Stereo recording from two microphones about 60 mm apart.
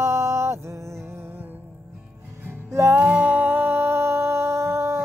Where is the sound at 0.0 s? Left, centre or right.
Right.